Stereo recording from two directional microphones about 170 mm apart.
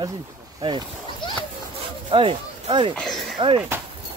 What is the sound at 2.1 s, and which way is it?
Speech, 30° right (ahead or behind).